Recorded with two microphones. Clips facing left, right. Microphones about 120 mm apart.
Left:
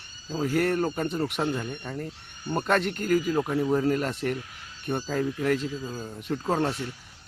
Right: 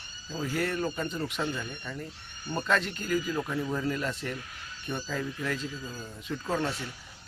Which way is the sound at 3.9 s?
50° left (ahead or behind).